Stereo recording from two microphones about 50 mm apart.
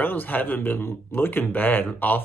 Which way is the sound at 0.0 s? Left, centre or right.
Left.